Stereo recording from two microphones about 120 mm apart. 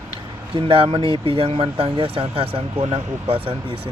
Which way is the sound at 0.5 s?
50° right (ahead or behind).